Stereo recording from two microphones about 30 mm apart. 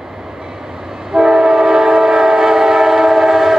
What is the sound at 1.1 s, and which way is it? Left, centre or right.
Train, centre.